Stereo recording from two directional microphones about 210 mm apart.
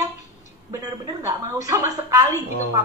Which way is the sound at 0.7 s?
15° right (ahead or behind).